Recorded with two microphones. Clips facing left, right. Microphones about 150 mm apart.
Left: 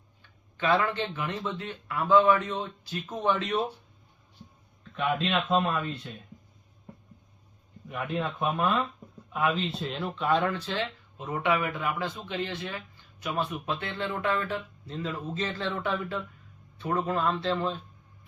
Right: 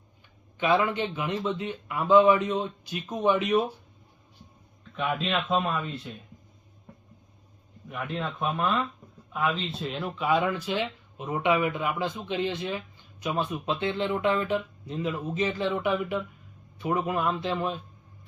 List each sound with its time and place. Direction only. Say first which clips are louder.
0.5 s speech: right 2 dB; 15° right (ahead or behind)
4.9 s speech: left 1 dB; centre (ahead or behind)
7.9 s speech: left 1 dB; centre (ahead or behind); by 17.7 s 15° right (ahead or behind)